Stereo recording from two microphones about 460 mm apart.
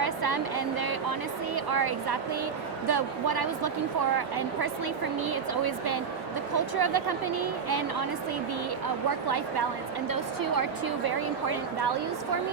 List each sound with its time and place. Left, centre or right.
0.0 s vehicle: right
1.5 s a woman's voice: right
5.2 s a woman's voice: right
9.2 s a woman's voice: right